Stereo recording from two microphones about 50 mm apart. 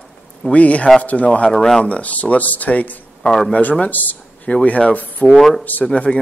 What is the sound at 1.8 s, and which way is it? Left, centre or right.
Speech, left.